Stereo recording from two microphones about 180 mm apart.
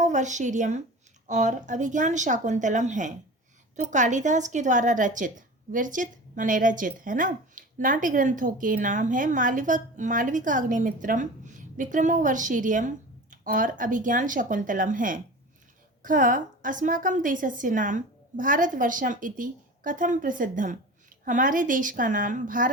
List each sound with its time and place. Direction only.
0.0 s a woman's voice: 40° right (ahead or behind)